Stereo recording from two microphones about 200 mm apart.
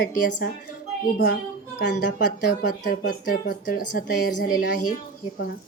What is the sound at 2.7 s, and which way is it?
A woman's voice, 45° left (ahead or behind).